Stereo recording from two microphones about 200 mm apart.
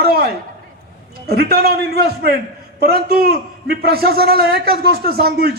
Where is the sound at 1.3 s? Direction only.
50° right (ahead or behind).